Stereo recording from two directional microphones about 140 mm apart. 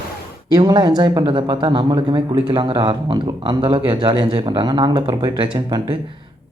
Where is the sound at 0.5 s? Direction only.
30° right (ahead or behind).